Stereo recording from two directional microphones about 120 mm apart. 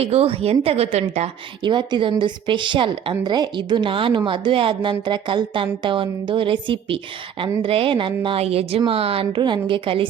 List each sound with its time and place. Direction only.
0.0 s a woman's voice: 55° right (ahead or behind)
1.6 s a woman's voice: 40° right (ahead or behind)